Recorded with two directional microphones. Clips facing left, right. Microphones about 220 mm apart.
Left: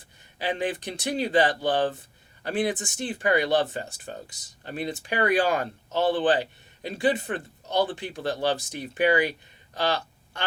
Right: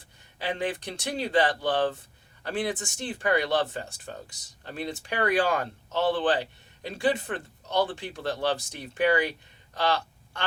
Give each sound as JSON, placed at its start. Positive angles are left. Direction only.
{"t": 0.3, "sound": "speech", "side_deg": 15}